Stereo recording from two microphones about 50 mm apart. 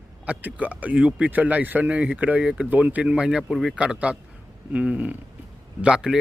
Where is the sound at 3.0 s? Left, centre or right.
Centre.